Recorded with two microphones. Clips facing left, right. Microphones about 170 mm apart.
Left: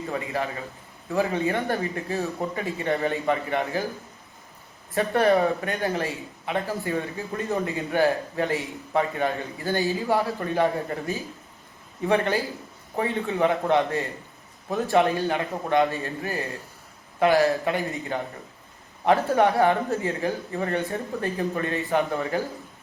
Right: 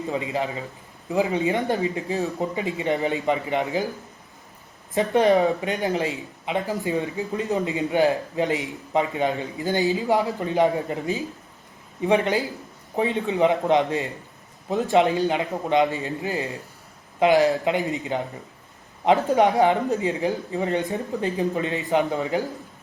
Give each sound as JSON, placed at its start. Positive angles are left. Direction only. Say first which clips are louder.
{"t": 0.0, "sound": "speech", "louder": "right 2 dB", "side_deg": -20}
{"t": 4.9, "sound": "speech", "louder": "right 2 dB", "side_deg": -20}